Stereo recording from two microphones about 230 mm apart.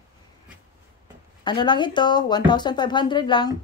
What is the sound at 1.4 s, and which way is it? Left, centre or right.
A woman's voice, centre.